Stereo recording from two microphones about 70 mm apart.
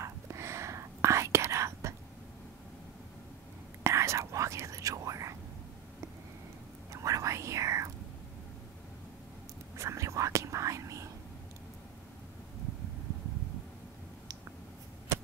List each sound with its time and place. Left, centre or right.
0.0 s whispering: right
3.8 s whispering: right
6.9 s whispering: right
9.8 s whispering: right